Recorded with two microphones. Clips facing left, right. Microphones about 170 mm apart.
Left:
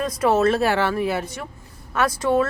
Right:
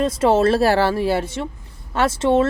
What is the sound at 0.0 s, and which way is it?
Speech, 25° right (ahead or behind).